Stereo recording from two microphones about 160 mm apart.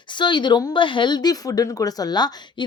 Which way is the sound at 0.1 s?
30° left (ahead or behind).